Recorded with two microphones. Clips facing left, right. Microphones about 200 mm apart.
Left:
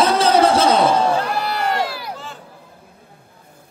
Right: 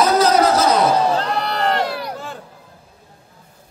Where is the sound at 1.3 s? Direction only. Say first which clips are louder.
Right 1 dB; 5° left (ahead or behind).